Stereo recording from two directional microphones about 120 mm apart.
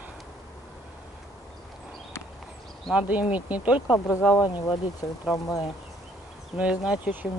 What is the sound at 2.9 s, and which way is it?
Speech, 10° right (ahead or behind).